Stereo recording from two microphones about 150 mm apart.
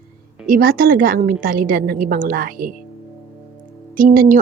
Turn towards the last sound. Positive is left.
turn(degrees=-65)  # may be behind; listen again after turning